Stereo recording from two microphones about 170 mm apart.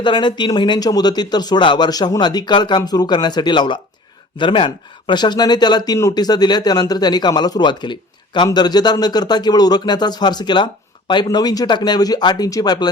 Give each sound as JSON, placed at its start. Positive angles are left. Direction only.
{"t": 0.0, "sound": "speech", "side_deg": 25}